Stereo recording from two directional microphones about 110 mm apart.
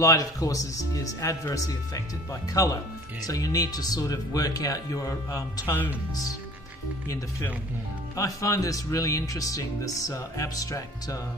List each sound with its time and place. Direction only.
0.0 s speech: 35° left (ahead or behind)
8.2 s speech: 30° left (ahead or behind)